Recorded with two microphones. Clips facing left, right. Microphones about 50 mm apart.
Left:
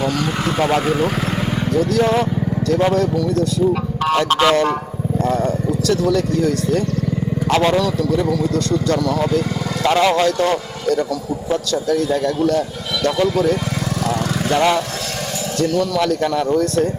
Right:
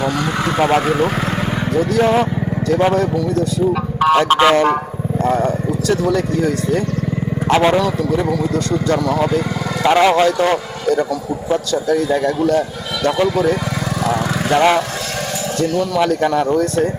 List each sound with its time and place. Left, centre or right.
0.0 s speech: right
14.0 s lawn mower: right
15.5 s speech: right